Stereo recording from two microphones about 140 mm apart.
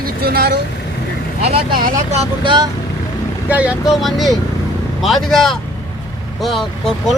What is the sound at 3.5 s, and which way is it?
Speech, 10° right (ahead or behind).